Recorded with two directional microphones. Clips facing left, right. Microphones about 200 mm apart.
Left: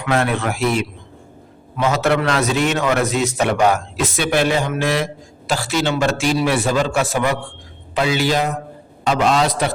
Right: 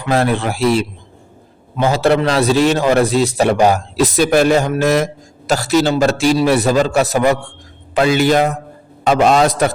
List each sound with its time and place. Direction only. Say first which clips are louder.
0.0 s a man's voice: right 3 dB; 35° right (ahead or behind)